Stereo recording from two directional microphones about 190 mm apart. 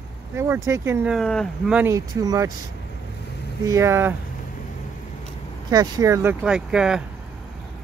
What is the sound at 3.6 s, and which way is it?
Speech, 15° right (ahead or behind).